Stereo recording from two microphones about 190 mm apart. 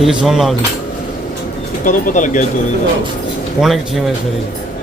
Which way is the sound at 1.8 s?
40° left (ahead or behind).